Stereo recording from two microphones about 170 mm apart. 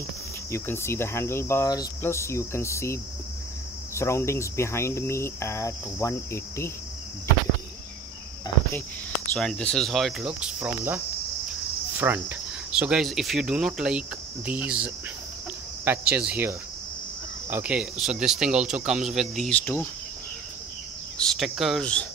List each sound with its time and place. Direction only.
0.5 s cricket: 15° left (ahead or behind)
9.3 s speech: 5° left (ahead or behind)
10.7 s speech: 15° right (ahead or behind)
12.0 s speech: 10° right (ahead or behind); by 19.9 s 10° left (ahead or behind)
21.2 s speech: centre (ahead or behind)